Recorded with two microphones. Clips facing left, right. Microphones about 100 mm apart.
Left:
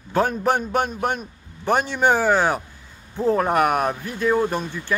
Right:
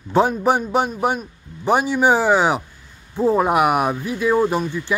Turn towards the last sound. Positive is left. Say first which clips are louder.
# right 4 dB
turn(degrees=-15)  # may be behind; listen again after turning